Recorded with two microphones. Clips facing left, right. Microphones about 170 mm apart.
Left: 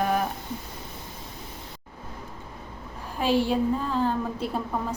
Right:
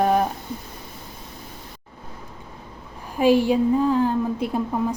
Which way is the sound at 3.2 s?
15° right (ahead or behind).